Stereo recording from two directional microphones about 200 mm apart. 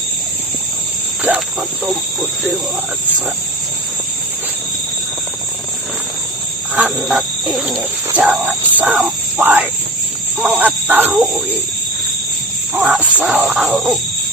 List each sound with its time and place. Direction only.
6.7 s speech: 5° right (ahead or behind)
12.7 s speech: 5° right (ahead or behind)